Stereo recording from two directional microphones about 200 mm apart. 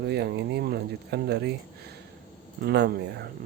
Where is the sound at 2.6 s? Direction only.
55° right (ahead or behind).